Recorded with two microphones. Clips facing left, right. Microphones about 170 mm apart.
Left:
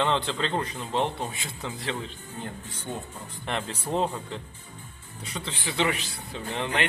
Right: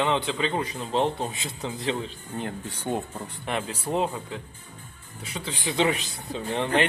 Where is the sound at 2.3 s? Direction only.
65° right (ahead or behind).